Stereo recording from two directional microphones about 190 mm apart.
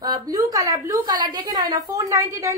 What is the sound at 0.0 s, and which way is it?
A woman's voice, 20° right (ahead or behind).